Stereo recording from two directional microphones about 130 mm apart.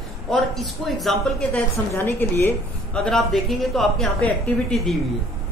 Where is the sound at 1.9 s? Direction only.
20° left (ahead or behind).